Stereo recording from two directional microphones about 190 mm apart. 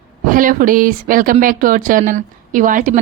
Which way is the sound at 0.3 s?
45° right (ahead or behind).